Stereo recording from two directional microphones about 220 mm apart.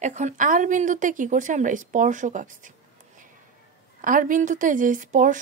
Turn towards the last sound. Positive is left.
turn(degrees=-35)  # may be behind; listen again after turning